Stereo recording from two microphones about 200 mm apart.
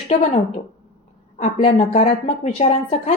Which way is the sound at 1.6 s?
30° left (ahead or behind).